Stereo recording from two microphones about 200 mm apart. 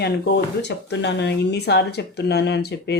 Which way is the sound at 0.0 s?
55° left (ahead or behind).